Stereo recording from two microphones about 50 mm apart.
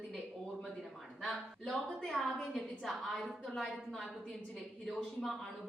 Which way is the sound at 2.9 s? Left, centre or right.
Centre.